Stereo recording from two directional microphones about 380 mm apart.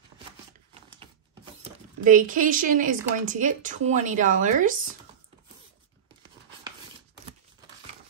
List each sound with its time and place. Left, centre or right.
1.6 s speech: right